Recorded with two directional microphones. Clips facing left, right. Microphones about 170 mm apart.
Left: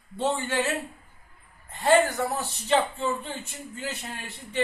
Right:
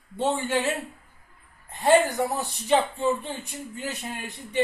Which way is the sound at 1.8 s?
15° right (ahead or behind).